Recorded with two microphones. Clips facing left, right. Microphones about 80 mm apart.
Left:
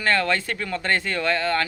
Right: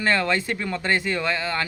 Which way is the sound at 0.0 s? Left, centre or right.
Centre.